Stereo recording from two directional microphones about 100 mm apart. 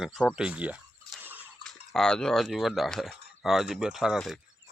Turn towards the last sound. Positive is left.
turn(degrees=-5)  # may be behind; listen again after turning